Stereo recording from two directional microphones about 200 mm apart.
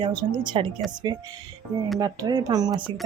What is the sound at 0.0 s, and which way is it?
Speech, 20° right (ahead or behind).